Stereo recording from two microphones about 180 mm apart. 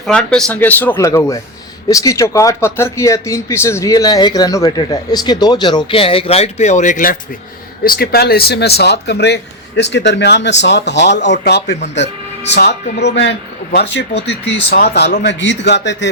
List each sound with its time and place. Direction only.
0.0 s speech: 5° left (ahead or behind); by 15.1 s 65° left (ahead or behind)
15.2 s speech: 75° left (ahead or behind)